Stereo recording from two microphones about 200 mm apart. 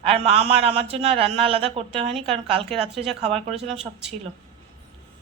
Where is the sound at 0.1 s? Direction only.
30° right (ahead or behind).